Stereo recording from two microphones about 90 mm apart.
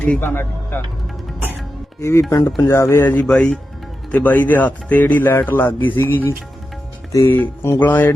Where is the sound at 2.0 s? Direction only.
35° left (ahead or behind).